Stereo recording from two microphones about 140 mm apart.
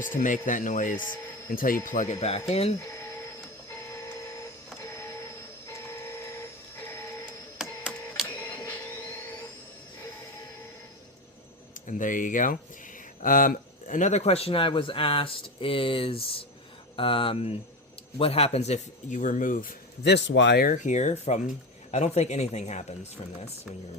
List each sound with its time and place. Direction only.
0.0 s speech: 70° left (ahead or behind)
1.5 s speech: 90° left
1.9 s speech: 60° left (ahead or behind)
5.6 s train: 20° left (ahead or behind)
7.6 s printer: 5° right (ahead or behind)
11.9 s speech: 70° left (ahead or behind)